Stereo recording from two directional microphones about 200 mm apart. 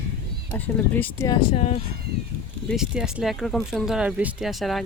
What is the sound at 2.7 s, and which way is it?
Speech, centre (ahead or behind).